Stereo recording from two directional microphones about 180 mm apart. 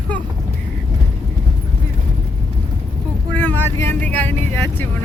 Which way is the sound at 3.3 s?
10° left (ahead or behind).